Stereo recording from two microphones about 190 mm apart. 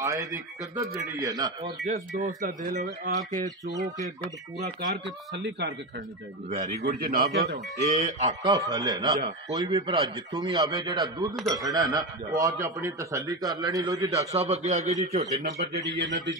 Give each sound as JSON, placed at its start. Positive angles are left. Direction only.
{"t": 0.0, "sound": "speech", "side_deg": -15}
{"t": 1.9, "sound": "speech", "side_deg": -40}
{"t": 3.3, "sound": "speech", "side_deg": -20}
{"t": 4.6, "sound": "speech", "side_deg": -60}
{"t": 6.8, "sound": "speech", "side_deg": -50}
{"t": 7.8, "sound": "a man's voice", "side_deg": -40}
{"t": 8.4, "sound": "speech", "side_deg": -20}
{"t": 14.3, "sound": "a man's voice", "side_deg": -35}
{"t": 16.0, "sound": "a man's voice", "side_deg": -70}